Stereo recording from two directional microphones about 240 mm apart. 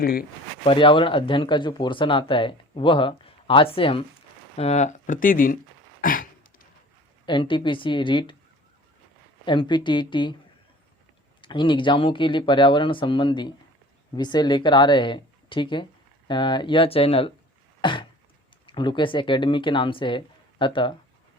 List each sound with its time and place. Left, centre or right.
0.0 s speech: left
0.6 s speech: left
6.0 s a sound: left
7.3 s speech: centre
9.5 s speech: centre
11.3 s speech: centre
17.7 s throat clearing: centre
18.6 s speech: centre